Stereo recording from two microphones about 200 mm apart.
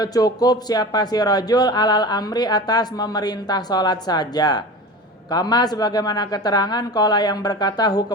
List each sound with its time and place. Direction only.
0.0 s speech: 20° left (ahead or behind)